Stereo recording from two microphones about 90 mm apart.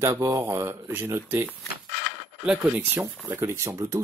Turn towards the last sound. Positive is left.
turn(degrees=-35)  # may be behind; listen again after turning